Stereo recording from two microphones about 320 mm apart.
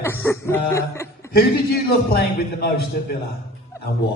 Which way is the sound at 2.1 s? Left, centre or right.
Left.